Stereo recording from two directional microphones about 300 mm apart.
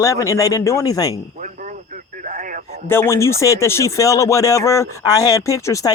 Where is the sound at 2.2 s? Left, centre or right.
Right.